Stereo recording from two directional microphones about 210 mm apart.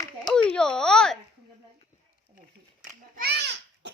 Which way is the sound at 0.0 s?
20° left (ahead or behind).